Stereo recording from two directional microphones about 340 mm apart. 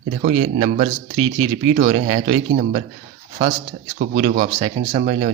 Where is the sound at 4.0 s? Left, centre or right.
Centre.